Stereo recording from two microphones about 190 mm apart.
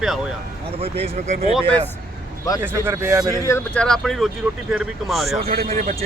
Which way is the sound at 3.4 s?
10° left (ahead or behind).